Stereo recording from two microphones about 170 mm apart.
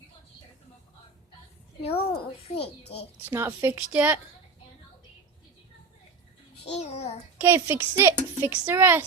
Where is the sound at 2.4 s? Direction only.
35° left (ahead or behind).